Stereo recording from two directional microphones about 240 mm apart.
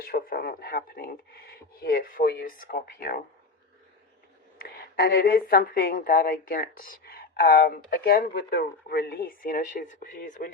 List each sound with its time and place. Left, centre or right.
0.0 s a woman's voice: left
4.5 s a woman's voice: left